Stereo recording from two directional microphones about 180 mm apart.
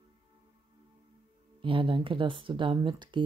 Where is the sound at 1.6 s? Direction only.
30° right (ahead or behind).